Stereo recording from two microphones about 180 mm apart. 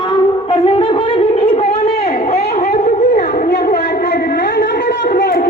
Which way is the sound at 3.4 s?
65° left (ahead or behind).